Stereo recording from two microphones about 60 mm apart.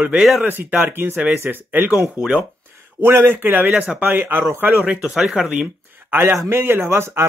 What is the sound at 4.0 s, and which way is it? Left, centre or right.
Speech, right.